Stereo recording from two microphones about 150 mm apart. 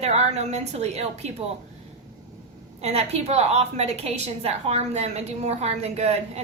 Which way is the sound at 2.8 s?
45° right (ahead or behind).